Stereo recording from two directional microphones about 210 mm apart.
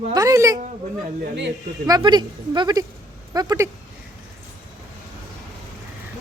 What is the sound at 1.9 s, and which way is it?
Speech, 20° right (ahead or behind).